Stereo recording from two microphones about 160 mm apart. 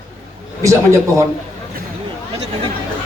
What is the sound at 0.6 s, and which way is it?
Speech, 20° right (ahead or behind).